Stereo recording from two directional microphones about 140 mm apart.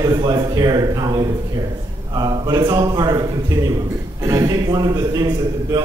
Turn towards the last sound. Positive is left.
turn(degrees=-30)  # may be behind; listen again after turning